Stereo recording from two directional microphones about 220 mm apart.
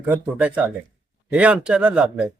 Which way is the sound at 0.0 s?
5° right (ahead or behind).